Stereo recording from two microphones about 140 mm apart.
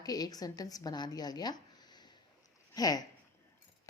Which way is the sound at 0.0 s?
25° left (ahead or behind).